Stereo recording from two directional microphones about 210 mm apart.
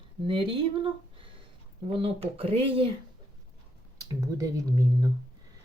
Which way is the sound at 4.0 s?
15° right (ahead or behind).